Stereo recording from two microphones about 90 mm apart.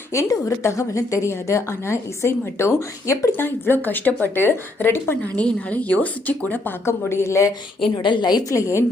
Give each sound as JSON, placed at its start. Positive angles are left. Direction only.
{"t": 0.1, "sound": "a woman's voice", "side_deg": 35}
{"t": 3.3, "sound": "speech", "side_deg": 20}
{"t": 7.9, "sound": "a woman's voice", "side_deg": 55}
{"t": 8.5, "sound": "a woman's voice", "side_deg": 35}